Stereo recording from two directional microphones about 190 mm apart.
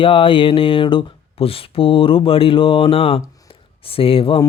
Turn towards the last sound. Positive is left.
turn(degrees=25)  # may be behind; listen again after turning